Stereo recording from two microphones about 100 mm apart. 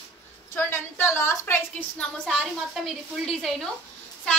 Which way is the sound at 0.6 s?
25° left (ahead or behind).